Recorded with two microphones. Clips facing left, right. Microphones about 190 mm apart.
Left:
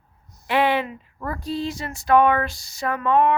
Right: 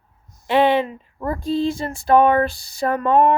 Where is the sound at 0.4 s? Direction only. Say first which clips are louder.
Right 4 dB; 25° right (ahead or behind).